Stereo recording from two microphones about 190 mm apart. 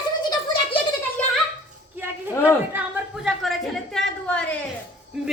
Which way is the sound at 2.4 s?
10° right (ahead or behind).